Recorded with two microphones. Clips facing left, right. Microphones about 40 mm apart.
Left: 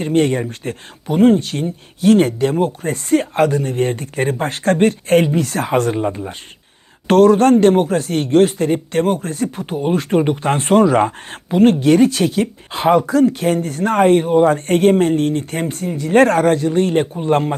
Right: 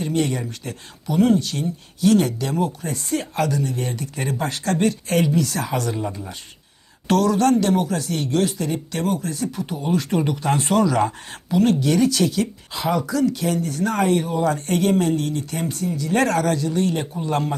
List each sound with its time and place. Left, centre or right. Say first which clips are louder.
0.0 s a man's voice: left 7 dB; left